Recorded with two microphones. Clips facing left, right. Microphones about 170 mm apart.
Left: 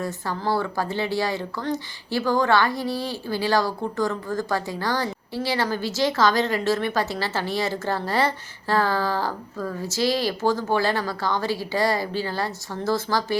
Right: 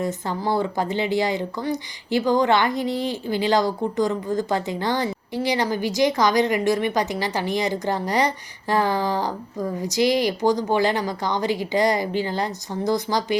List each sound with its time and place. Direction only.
0.0 s speech: 20° right (ahead or behind)